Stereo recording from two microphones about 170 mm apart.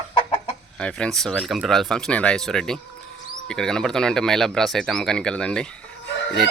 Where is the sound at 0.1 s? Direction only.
35° left (ahead or behind).